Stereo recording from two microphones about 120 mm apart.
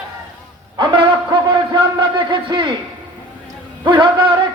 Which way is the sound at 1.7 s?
40° right (ahead or behind).